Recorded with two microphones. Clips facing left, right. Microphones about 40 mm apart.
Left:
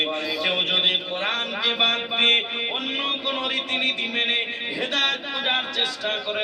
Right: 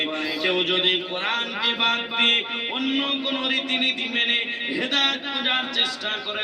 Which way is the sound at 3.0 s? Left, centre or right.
Left.